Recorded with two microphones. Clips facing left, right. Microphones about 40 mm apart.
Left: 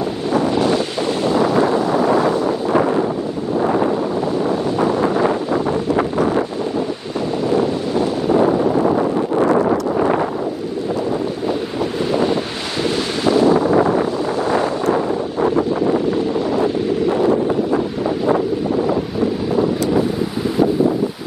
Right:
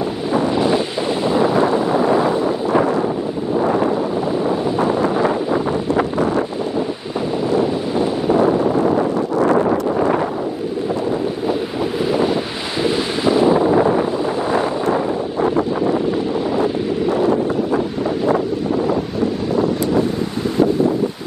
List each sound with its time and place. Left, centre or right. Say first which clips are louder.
0.3 s wind noise: even; centre
3.6 s a sound: left 1 dB; centre
4.5 s wind noise: even; right
7.5 s wind noise: even; centre
8.4 s a sound: left 1 dB; centre
9.6 s wind noise: even; centre
12.8 s wind noise: right 1 dB; centre
15.4 s wind noise: left 1 dB; centre
19.5 s wind: even; centre